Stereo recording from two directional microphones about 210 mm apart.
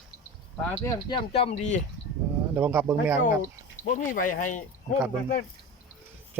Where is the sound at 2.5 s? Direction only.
10° right (ahead or behind).